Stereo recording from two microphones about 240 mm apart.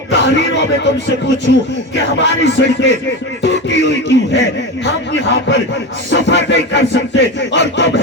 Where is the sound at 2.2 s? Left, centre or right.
Left.